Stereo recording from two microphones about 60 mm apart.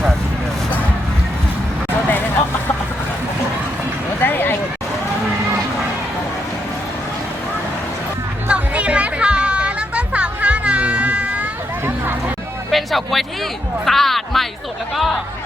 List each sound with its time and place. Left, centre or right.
4.2 s a sound: left
8.4 s music: right
12.7 s music: centre